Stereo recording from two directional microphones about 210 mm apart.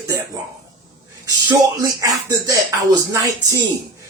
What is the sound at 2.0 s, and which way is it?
Speech, 15° right (ahead or behind).